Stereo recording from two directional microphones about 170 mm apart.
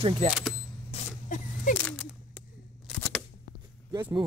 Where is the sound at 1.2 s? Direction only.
50° left (ahead or behind).